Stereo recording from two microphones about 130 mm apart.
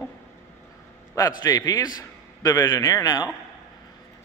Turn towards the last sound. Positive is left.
turn(degrees=25)  # may be behind; listen again after turning